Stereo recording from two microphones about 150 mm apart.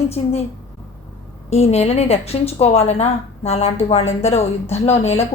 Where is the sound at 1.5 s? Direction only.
45° left (ahead or behind).